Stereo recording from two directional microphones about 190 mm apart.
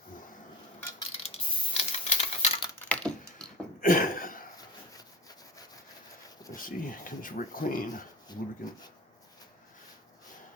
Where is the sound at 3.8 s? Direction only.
45° left (ahead or behind).